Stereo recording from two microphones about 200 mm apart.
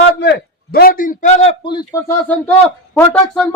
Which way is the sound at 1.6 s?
20° left (ahead or behind).